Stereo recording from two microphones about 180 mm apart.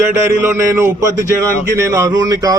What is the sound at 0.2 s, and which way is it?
A man's voice, 15° right (ahead or behind).